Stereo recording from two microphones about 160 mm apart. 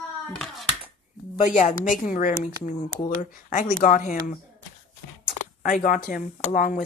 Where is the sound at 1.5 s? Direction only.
50° left (ahead or behind).